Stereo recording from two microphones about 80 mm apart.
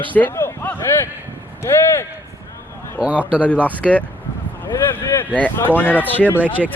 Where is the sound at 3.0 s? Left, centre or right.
Centre.